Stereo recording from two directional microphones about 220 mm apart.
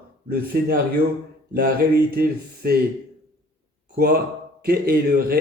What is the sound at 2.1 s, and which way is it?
Speech, 45° right (ahead or behind).